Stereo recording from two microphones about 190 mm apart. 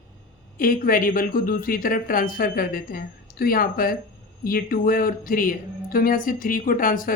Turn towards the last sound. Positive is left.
turn(degrees=45)  # may be behind; listen again after turning